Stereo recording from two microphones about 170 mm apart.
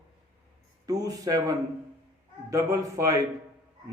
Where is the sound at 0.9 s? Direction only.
20° right (ahead or behind).